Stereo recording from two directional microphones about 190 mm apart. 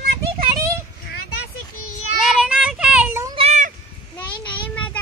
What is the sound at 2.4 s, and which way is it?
Child singing, 5° right (ahead or behind).